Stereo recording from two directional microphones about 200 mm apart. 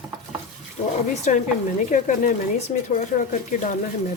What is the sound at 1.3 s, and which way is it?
Speech, 40° left (ahead or behind).